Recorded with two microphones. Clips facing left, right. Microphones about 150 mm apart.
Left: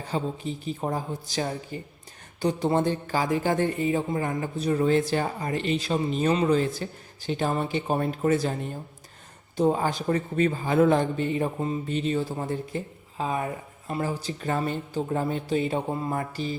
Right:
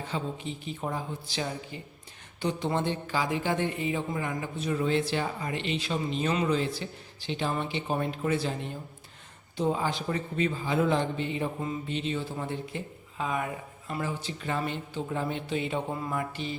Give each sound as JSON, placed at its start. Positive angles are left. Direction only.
{"t": 0.0, "sound": "a man's voice", "side_deg": 40}